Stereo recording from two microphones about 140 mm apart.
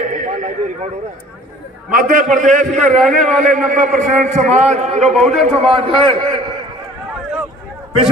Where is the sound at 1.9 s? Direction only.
75° right (ahead or behind); by 3.0 s 55° right (ahead or behind).